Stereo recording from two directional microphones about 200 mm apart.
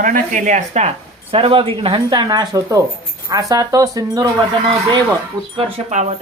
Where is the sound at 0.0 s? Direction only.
40° right (ahead or behind); by 4.3 s 20° right (ahead or behind).